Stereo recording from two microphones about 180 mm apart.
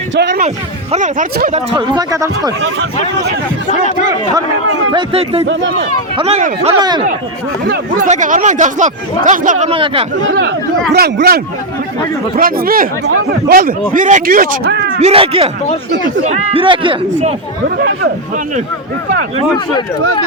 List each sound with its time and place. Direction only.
0.3 s speech: 40° right (ahead or behind)
1.7 s speech: 25° right (ahead or behind)
3.7 s speech: 40° left (ahead or behind)
4.9 s speech: 30° right (ahead or behind)
6.7 s speech: 25° right (ahead or behind)
7.9 s speech: 45° right (ahead or behind)
9.6 s speech: 30° right (ahead or behind)
10.9 s speech: 60° right (ahead or behind)
12.4 s speech: 55° right (ahead or behind)
13.9 s speech: 45° right (ahead or behind)
15.0 s speech: 30° right (ahead or behind)